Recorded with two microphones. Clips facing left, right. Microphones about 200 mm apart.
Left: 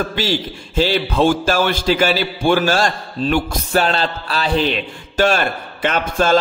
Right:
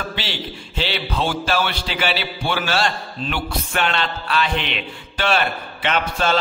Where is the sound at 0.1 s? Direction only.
45° left (ahead or behind).